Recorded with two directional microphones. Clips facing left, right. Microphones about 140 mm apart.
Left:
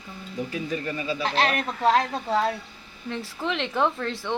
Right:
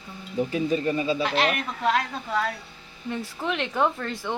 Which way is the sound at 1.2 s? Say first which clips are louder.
Even; 35° left (ahead or behind).